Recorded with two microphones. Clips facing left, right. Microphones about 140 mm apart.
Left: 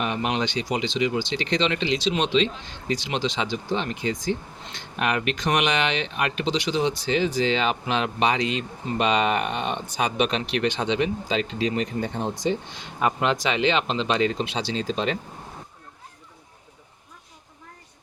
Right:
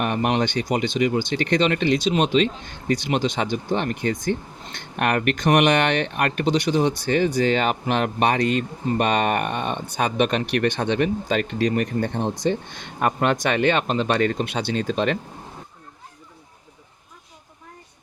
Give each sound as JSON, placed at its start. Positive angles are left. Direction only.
{"t": 0.0, "sound": "speech", "side_deg": -55}